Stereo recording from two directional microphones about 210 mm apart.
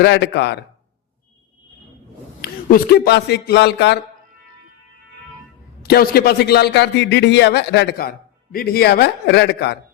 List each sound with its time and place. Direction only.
0.0 s a man's voice: 55° left (ahead or behind)
2.4 s speech: 45° left (ahead or behind)
5.8 s a man's voice: 45° left (ahead or behind)